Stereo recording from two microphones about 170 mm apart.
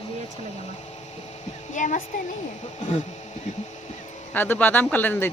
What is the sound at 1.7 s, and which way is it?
Speech, 45° left (ahead or behind).